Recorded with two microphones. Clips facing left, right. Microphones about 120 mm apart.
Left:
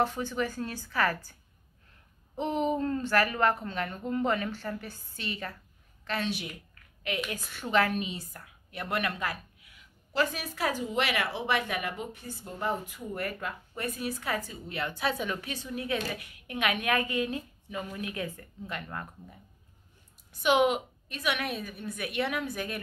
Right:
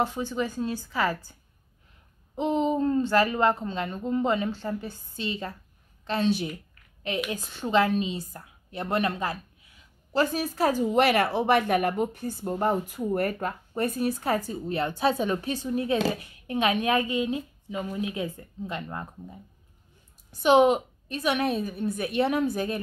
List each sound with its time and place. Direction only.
0.0 s speech: 15° right (ahead or behind)
2.3 s speech: 20° right (ahead or behind)
6.0 s a sound: 30° right (ahead or behind)
7.2 s speech: 25° right (ahead or behind)
20.4 s speech: 35° right (ahead or behind)